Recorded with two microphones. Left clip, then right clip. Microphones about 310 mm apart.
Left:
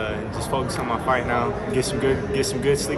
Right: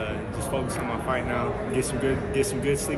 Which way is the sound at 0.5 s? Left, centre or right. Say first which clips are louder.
Left 5 dB; centre.